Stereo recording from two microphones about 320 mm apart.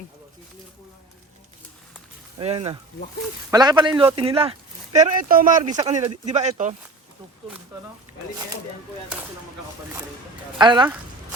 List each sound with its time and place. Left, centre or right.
2.4 s a man's voice: centre
10.6 s a man's voice: centre